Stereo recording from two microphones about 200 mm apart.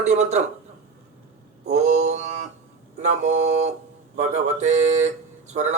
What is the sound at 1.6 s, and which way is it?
Speech, 35° right (ahead or behind).